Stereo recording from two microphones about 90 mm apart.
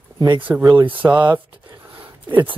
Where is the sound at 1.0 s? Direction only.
20° right (ahead or behind).